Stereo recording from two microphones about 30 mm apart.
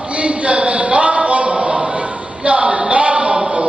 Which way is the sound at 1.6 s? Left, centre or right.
Right.